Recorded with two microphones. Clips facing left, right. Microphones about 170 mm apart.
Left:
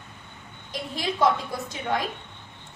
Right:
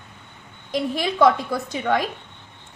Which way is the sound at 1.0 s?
70° right (ahead or behind).